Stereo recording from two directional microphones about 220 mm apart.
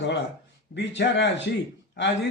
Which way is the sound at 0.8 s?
55° left (ahead or behind).